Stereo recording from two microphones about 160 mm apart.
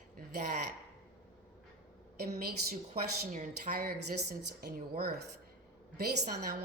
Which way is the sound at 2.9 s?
50° right (ahead or behind).